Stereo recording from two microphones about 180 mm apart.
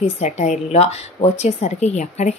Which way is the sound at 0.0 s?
40° left (ahead or behind).